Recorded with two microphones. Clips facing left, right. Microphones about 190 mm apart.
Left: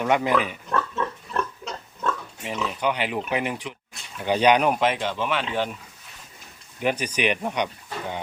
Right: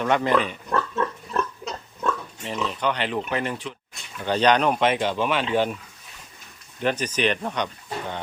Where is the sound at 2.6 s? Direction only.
10° left (ahead or behind).